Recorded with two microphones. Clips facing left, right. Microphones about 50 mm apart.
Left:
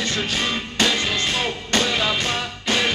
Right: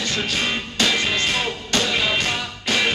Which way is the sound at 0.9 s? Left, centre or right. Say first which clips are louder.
Right 1 dB; right.